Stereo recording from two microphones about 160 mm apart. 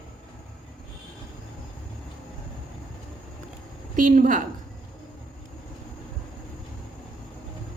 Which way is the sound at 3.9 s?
55° right (ahead or behind).